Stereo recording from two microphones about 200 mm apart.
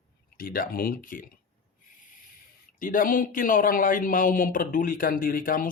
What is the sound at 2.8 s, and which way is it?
Speech, 45° left (ahead or behind).